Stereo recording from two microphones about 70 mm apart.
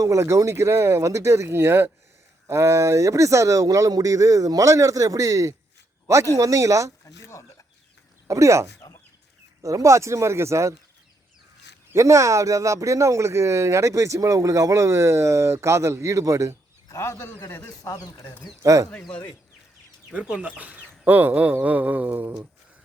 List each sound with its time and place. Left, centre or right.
0.0 s speech: right
7.0 s a sound: left
8.3 s speech: right
8.8 s chicken: left
9.6 s speech: right
11.9 s speech: right
16.9 s a man's voice: left
17.8 s speech: left
18.6 s speech: right
20.1 s speech: centre